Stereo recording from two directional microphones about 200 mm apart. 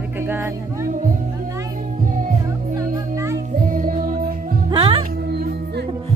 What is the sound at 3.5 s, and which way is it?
Music, 45° right (ahead or behind).